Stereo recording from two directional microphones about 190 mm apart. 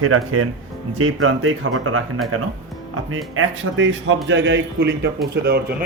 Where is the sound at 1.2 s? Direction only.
90° right.